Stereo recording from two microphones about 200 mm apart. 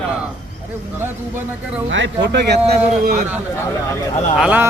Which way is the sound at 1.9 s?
65° right (ahead or behind).